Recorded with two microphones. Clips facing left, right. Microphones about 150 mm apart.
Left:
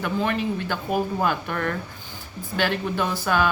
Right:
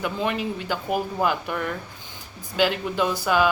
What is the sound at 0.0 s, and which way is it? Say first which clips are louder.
Speech: left 1 dB; 15° right (ahead or behind).